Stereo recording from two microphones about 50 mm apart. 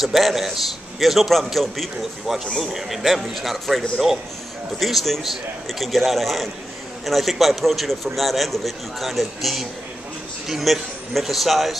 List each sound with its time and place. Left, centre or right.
0.0 s a man's voice: centre